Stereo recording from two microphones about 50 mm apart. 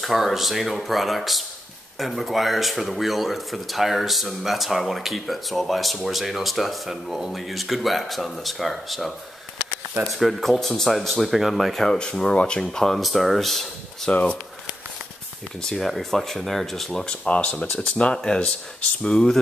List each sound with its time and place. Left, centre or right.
0.0 s speech: centre
10.1 s speech: centre
12.8 s speech: centre
14.1 s speech: left
15.6 s speech: centre
17.0 s speech: left
17.7 s speech: centre